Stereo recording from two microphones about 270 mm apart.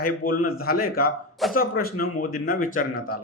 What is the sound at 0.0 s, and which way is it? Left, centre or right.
A man's voice, left.